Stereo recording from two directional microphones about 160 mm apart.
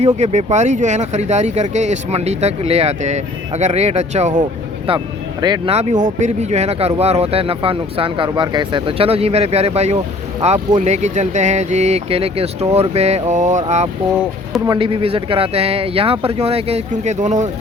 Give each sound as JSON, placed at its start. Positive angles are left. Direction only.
{"t": 0.2, "sound": "speech", "side_deg": -45}
{"t": 4.9, "sound": "speech", "side_deg": -25}
{"t": 5.7, "sound": "speech", "side_deg": -45}
{"t": 14.7, "sound": "speech", "side_deg": -35}